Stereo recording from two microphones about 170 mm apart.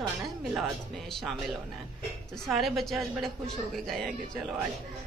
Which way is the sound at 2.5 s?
Centre (ahead or behind).